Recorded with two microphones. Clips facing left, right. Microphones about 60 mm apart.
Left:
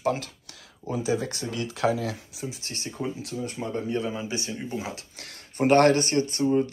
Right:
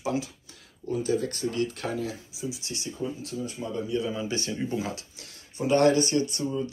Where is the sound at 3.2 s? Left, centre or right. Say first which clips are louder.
Left 1 dB; left.